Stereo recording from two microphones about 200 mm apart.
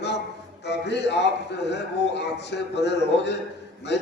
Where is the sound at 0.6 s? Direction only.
60° left (ahead or behind).